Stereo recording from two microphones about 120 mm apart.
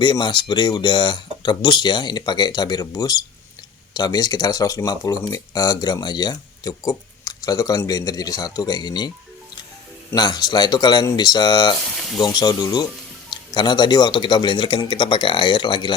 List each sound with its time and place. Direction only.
0.0 s speech: 40° left (ahead or behind)
10.2 s speech: 35° left (ahead or behind)
11.9 s sizzle: 5° left (ahead or behind)
12.2 s speech: 35° left (ahead or behind)